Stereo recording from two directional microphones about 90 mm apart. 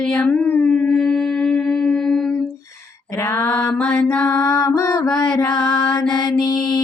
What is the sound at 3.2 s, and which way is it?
Music, 25° left (ahead or behind).